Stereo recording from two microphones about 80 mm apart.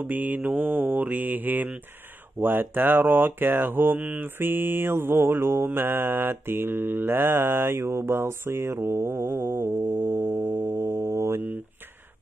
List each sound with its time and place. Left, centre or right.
0.0 s speech: right